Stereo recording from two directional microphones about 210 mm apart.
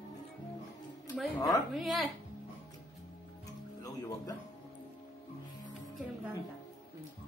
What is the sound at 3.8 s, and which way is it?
Speech, 15° left (ahead or behind).